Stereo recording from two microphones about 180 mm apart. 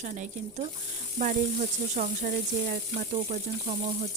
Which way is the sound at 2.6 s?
40° right (ahead or behind).